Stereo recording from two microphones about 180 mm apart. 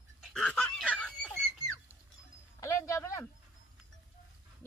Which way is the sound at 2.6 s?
15° left (ahead or behind).